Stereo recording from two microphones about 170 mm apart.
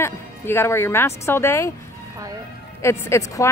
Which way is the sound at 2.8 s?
15° left (ahead or behind).